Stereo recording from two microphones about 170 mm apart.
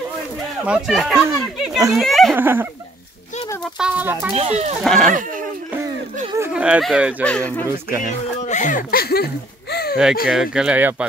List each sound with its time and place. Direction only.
0.7 s speech: centre (ahead or behind)
2.3 s speech: 10° right (ahead or behind)
3.7 s speech: 5° right (ahead or behind)
4.3 s speech: 35° right (ahead or behind)
4.8 s speech: 5° left (ahead or behind)
6.4 s speech: 5° right (ahead or behind)
7.2 s speech: 5° left (ahead or behind)
7.9 s speech: 50° left (ahead or behind); by 9.9 s 65° left (ahead or behind)
10.3 s speech: 5° right (ahead or behind)